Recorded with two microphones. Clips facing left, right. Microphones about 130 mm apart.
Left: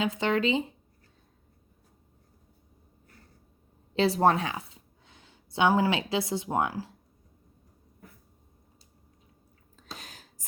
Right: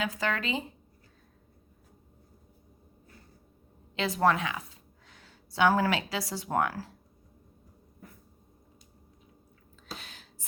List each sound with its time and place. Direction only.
0.0 s speech: 25° left (ahead or behind)
3.9 s a woman's voice: 30° left (ahead or behind)
9.7 s a sound: 40° left (ahead or behind)